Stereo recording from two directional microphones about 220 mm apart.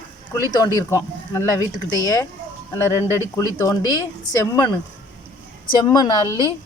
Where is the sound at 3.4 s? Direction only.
15° left (ahead or behind).